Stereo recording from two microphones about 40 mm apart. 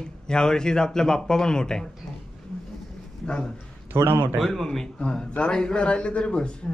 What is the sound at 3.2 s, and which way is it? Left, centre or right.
Speech, centre.